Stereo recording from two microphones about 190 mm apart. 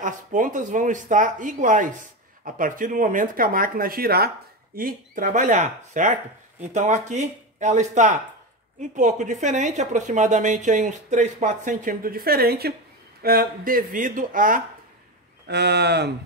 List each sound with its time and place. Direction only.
0.0 s speech: 40° right (ahead or behind)
15.4 s speech: 60° right (ahead or behind)